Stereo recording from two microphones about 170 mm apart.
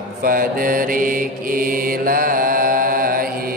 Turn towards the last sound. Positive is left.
turn(degrees=-60)  # may be behind; listen again after turning